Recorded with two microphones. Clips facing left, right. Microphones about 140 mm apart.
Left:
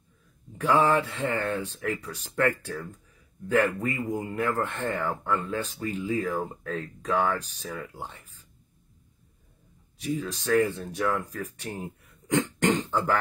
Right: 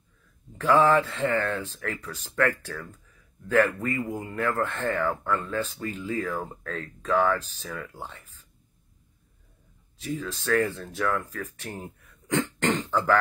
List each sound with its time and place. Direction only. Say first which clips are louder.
0.6 s speech: right 2 dB; 10° left (ahead or behind)
10.0 s speech: left 1 dB; 15° left (ahead or behind)